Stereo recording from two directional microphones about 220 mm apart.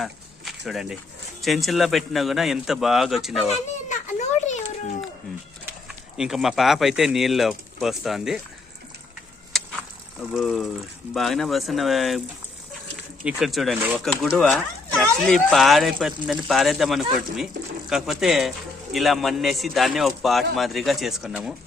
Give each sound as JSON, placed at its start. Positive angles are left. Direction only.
{"t": 0.0, "sound": "a sound", "side_deg": 0}
{"t": 1.4, "sound": "speech", "side_deg": 0}
{"t": 3.8, "sound": "children playing", "side_deg": 35}
{"t": 6.1, "sound": "speech", "side_deg": 0}
{"t": 9.5, "sound": "a sound", "side_deg": 0}
{"t": 10.3, "sound": "speech", "side_deg": 0}
{"t": 13.2, "sound": "speech", "side_deg": 0}